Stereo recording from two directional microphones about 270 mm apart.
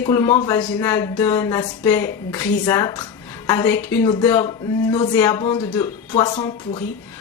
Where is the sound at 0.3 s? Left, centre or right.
Centre.